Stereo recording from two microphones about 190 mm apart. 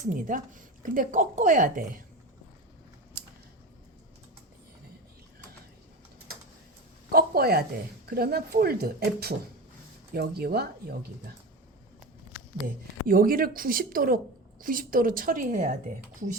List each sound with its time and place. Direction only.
0.0 s speech: 45° right (ahead or behind)
7.1 s speech: 55° right (ahead or behind)
13.1 s speech: 50° right (ahead or behind)